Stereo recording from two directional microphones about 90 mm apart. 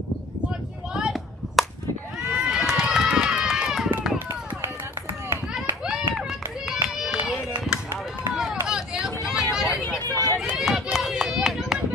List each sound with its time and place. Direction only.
0.9 s a sound: 5° right (ahead or behind)
2.3 s run: 5° right (ahead or behind)
6.7 s run: 5° right (ahead or behind)
8.4 s hubbub: 5° right (ahead or behind)
10.0 s vehicle: 45° right (ahead or behind)
10.5 s run: 5° right (ahead or behind)